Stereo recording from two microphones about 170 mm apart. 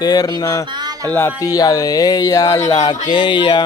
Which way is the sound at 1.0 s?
10° left (ahead or behind).